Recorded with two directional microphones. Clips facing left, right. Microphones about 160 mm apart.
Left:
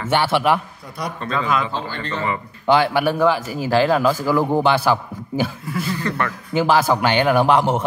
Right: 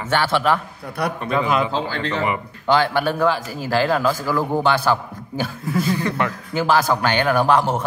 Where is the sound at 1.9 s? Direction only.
85° right.